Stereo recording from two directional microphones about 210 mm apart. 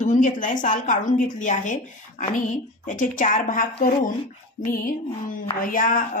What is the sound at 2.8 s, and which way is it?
A woman's voice, 40° left (ahead or behind).